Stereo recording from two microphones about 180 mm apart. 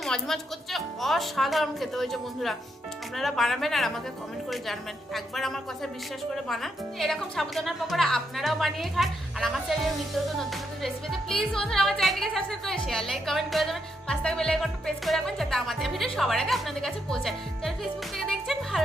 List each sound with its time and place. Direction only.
0.0 s a woman's voice: centre (ahead or behind)